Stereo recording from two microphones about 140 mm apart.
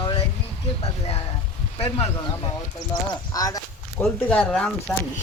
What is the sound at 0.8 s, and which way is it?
Speech, 45° left (ahead or behind).